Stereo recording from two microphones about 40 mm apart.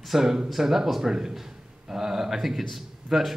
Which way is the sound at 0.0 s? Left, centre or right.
Centre.